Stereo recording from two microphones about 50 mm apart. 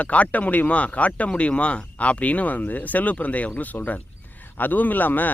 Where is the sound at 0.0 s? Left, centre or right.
Left.